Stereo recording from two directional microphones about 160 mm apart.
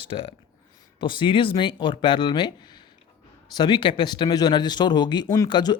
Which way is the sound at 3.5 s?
30° left (ahead or behind).